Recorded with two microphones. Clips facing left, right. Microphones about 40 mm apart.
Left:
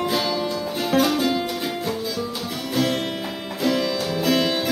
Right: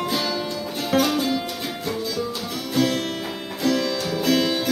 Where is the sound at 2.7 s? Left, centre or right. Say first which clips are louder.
Right 1 dB; centre.